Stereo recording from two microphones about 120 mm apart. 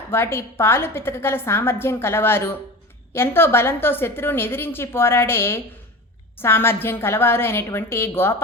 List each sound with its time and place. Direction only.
0.1 s a woman's voice: 20° left (ahead or behind)